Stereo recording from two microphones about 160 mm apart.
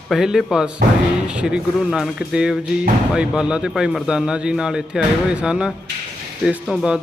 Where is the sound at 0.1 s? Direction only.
5° right (ahead or behind).